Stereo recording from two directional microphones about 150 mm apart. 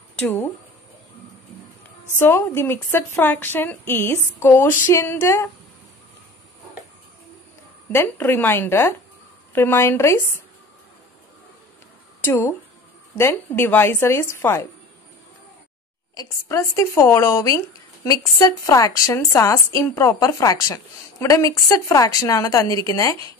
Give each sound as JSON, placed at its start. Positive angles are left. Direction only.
{"t": 2.1, "sound": "a woman's voice", "side_deg": 15}
{"t": 7.9, "sound": "a woman's voice", "side_deg": 15}
{"t": 12.2, "sound": "a woman's voice", "side_deg": 15}
{"t": 16.2, "sound": "a woman's voice", "side_deg": 20}